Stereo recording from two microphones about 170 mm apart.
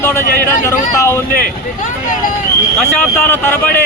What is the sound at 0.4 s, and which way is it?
Speech, 15° left (ahead or behind).